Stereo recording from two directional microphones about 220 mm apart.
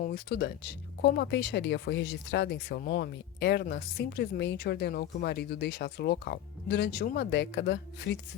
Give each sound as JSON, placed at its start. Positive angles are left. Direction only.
{"t": 0.0, "sound": "speech", "side_deg": 45}